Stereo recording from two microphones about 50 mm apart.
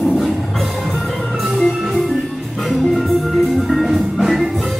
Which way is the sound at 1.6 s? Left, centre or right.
Centre.